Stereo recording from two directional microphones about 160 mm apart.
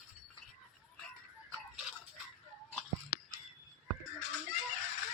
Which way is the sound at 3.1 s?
80° left.